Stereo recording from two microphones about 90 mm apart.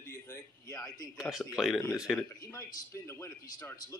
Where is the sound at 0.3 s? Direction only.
40° left (ahead or behind).